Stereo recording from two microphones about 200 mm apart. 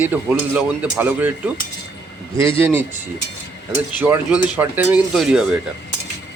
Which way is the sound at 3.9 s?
10° right (ahead or behind).